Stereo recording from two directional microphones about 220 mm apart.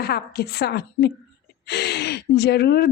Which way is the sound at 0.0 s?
45° left (ahead or behind).